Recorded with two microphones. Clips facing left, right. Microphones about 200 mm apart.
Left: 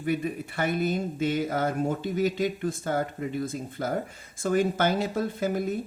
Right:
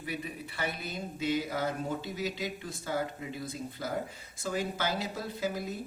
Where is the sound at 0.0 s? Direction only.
50° left (ahead or behind).